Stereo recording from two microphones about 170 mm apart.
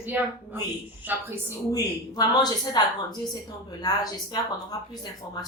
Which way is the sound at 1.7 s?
20° left (ahead or behind).